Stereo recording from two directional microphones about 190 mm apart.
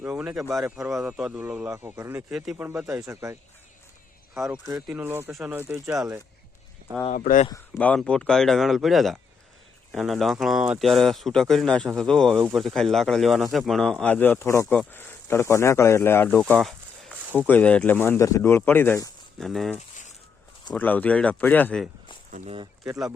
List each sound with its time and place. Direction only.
0.0 s a man's voice: 5° right (ahead or behind)
2.3 s speech: centre (ahead or behind)
2.6 s a man's voice: 15° right (ahead or behind)
4.4 s a man's voice: 15° right (ahead or behind)
7.1 s speech: 40° left (ahead or behind)
7.8 s speech: 5° left (ahead or behind)
19.4 s speech: centre (ahead or behind)
20.7 s speech: 10° left (ahead or behind)
22.3 s speech: 35° right (ahead or behind)